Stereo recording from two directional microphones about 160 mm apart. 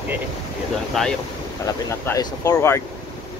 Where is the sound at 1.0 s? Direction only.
Centre (ahead or behind).